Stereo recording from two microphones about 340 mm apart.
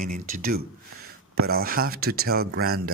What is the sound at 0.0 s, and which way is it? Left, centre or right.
Speech, right.